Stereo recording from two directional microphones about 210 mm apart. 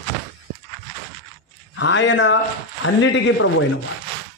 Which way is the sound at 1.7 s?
60° left (ahead or behind).